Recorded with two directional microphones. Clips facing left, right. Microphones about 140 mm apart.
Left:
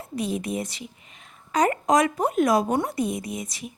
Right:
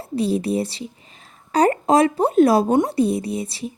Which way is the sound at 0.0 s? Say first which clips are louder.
Right 7 dB; 30° right (ahead or behind).